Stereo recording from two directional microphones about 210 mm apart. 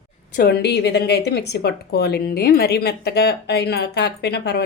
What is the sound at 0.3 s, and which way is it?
Speech, 50° left (ahead or behind).